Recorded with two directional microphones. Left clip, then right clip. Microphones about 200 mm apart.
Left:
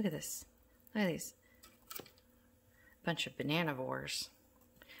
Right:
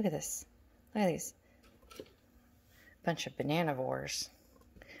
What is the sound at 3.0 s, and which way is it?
Speech, 5° right (ahead or behind).